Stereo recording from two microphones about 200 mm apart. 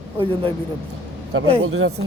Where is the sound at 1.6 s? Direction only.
90° right.